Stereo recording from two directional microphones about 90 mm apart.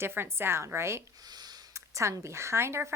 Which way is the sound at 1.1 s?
50° right (ahead or behind).